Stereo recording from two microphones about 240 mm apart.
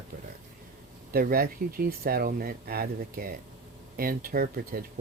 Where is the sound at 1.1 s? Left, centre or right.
Right.